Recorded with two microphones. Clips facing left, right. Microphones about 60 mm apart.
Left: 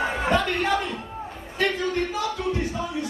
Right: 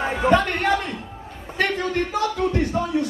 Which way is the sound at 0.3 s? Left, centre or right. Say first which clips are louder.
Right 5 dB; right.